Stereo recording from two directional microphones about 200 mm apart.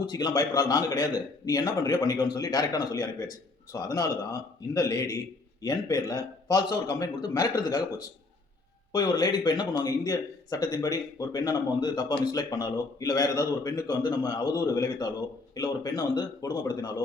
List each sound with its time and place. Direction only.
0.0 s a man's voice: 20° left (ahead or behind)